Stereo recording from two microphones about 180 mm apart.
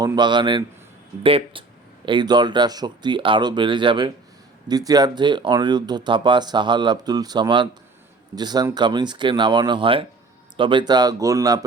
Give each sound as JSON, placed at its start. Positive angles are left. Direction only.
{"t": 0.0, "sound": "a man's voice", "side_deg": -25}